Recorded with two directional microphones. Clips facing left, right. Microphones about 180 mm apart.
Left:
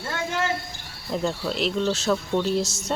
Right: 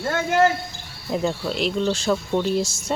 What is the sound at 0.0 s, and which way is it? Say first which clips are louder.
Speech: right 8 dB; 40° right (ahead or behind).